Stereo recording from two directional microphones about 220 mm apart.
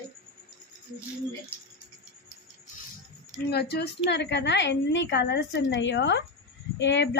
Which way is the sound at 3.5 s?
45° left (ahead or behind).